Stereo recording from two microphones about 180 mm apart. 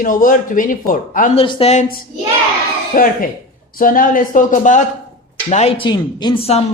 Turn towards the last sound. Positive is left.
turn(degrees=35)  # may be behind; listen again after turning